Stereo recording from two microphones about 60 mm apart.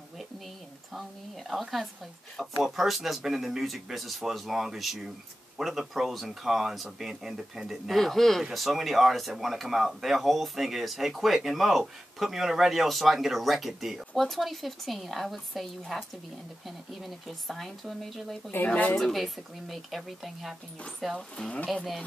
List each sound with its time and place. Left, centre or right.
1.5 s speech: centre
7.9 s speech: centre
18.5 s speech: left
18.9 s speech: centre